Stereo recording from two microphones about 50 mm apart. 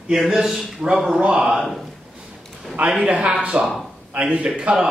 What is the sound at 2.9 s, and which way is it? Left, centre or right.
A man's voice, centre.